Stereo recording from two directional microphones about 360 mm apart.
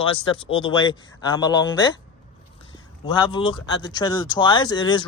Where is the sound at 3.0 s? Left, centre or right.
Centre.